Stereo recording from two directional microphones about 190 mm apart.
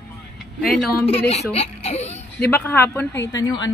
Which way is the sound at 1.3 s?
35° left (ahead or behind).